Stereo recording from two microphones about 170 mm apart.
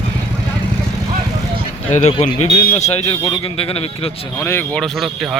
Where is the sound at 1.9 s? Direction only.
40° left (ahead or behind).